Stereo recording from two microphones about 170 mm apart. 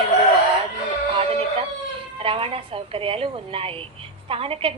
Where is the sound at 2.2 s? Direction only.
35° right (ahead or behind).